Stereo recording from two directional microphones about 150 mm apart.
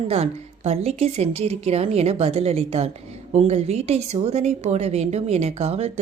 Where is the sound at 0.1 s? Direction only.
45° right (ahead or behind).